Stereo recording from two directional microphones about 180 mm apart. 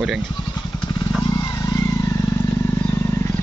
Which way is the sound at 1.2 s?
20° left (ahead or behind).